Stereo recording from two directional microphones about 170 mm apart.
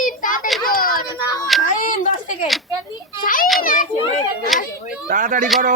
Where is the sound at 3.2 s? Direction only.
55° left (ahead or behind).